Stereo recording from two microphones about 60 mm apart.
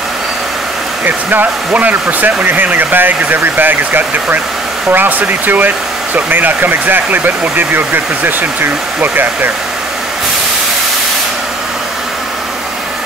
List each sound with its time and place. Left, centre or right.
1.0 s speech: right